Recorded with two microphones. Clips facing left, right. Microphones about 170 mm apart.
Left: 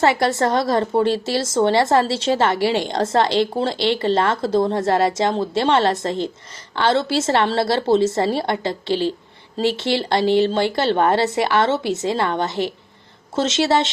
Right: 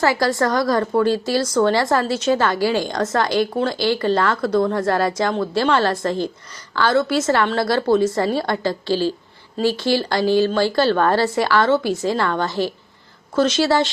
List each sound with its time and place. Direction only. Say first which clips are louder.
0.0 s speech: left 1 dB; 25° left (ahead or behind)